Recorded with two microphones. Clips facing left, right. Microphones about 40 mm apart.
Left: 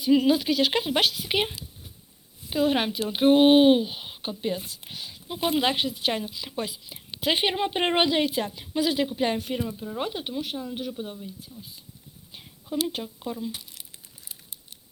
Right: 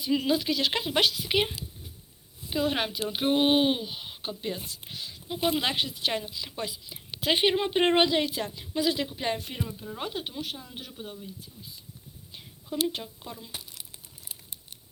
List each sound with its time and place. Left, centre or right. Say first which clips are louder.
0.1 s speech: left 6 dB; centre
0.3 s speech: left 4 dB; left
1.0 s speech: left 1 dB; left
1.3 s speech: even; centre
5.3 s speech: left 3 dB; centre
7.3 s speech: even; centre
8.0 s speech: left 2 dB; left
9.6 s speech: left 5 dB; centre
10.0 s speech: left 4 dB; left
13.0 s speech: left 8 dB; centre